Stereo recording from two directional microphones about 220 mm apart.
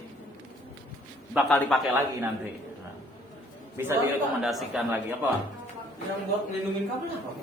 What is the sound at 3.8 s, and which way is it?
A man's voice, 10° right (ahead or behind).